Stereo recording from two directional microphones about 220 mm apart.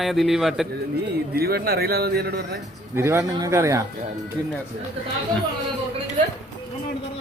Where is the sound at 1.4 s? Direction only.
45° right (ahead or behind).